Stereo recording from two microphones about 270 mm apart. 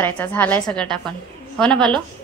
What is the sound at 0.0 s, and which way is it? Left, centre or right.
A woman's voice, centre.